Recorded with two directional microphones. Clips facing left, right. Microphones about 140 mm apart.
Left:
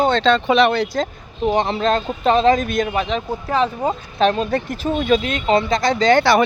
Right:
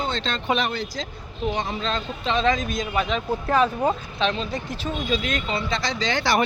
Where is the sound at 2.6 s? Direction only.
60° left (ahead or behind).